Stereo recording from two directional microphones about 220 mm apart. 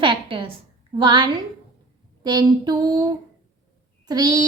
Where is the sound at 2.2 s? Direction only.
20° right (ahead or behind).